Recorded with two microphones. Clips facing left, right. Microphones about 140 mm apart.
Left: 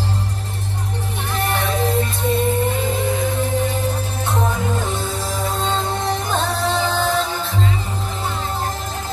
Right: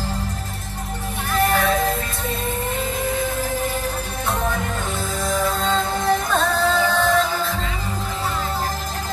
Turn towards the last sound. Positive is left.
turn(degrees=30)  # may be behind; listen again after turning